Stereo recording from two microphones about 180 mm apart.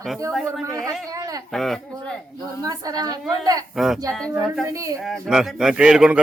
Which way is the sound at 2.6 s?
20° right (ahead or behind).